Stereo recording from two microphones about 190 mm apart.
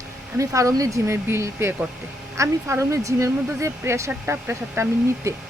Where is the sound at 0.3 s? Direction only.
15° right (ahead or behind).